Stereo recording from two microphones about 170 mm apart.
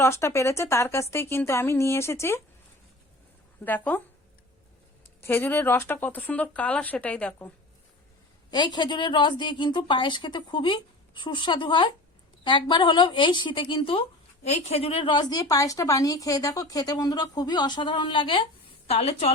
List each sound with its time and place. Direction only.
0.0 s speech: 15° left (ahead or behind)
3.9 s speech: 10° left (ahead or behind)
5.2 s speech: 10° left (ahead or behind)
8.4 s a woman's voice: 25° left (ahead or behind)